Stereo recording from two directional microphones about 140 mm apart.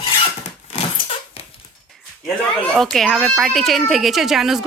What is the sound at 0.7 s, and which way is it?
Dog, 45° left (ahead or behind).